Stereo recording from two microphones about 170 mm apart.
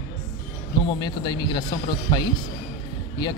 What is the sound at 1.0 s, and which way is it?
Speech, 25° left (ahead or behind).